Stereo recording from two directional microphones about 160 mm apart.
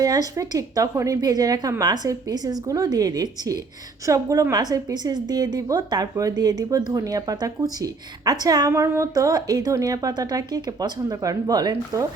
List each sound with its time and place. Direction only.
0.0 s a woman's voice: 20° right (ahead or behind)